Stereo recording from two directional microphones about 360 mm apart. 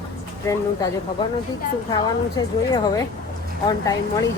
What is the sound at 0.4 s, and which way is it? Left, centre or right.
Speech, centre.